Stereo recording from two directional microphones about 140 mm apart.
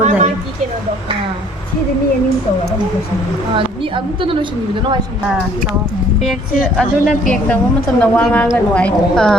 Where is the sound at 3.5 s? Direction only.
40° right (ahead or behind).